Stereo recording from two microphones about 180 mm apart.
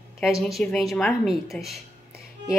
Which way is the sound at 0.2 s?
Centre (ahead or behind).